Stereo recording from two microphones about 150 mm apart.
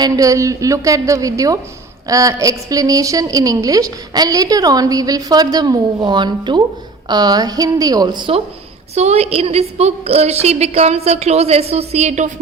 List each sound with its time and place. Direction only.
0.0 s a woman's voice: 20° right (ahead or behind)
9.0 s a woman's voice: 45° right (ahead or behind)